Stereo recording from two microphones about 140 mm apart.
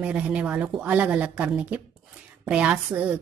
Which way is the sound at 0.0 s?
10° right (ahead or behind).